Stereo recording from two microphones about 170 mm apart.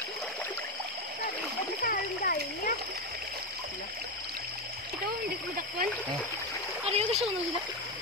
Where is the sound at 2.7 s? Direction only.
65° right (ahead or behind).